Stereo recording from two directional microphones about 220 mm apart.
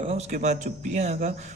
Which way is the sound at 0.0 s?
30° right (ahead or behind).